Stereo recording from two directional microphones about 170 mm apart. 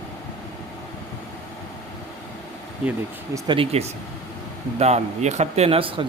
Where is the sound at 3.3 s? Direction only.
30° right (ahead or behind).